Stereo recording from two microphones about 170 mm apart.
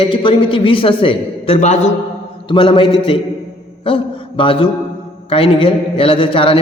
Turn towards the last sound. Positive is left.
turn(degrees=30)  # may be behind; listen again after turning